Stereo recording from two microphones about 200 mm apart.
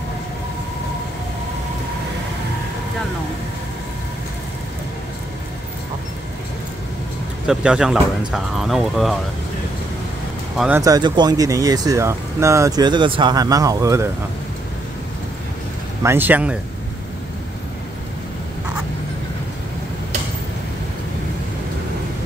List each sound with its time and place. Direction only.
7.4 s speech: 5° right (ahead or behind)
10.8 s speech: 20° right (ahead or behind)
16.0 s speech: 10° right (ahead or behind)